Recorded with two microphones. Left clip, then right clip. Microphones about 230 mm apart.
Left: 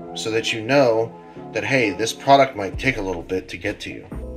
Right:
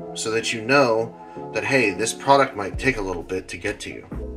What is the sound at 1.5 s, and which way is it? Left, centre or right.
Speech, centre.